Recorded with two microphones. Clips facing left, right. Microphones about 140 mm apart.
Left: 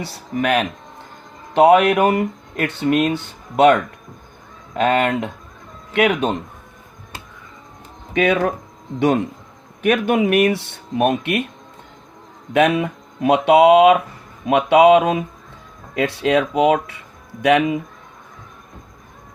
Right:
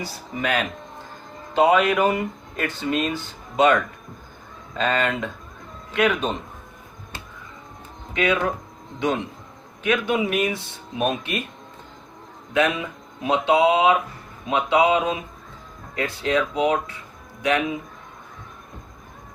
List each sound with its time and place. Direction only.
0.0 s speech: 60° left (ahead or behind)
8.1 s speech: 60° left (ahead or behind)
12.5 s speech: 65° left (ahead or behind)